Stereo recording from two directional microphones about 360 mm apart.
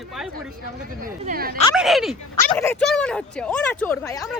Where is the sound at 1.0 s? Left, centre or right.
Right.